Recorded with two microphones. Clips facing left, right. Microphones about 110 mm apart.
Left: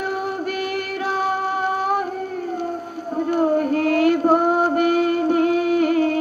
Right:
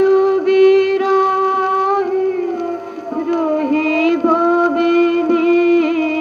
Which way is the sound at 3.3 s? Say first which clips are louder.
Right 3 dB; 50° right (ahead or behind).